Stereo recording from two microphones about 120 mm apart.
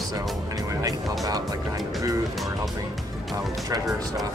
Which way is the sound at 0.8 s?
30° right (ahead or behind).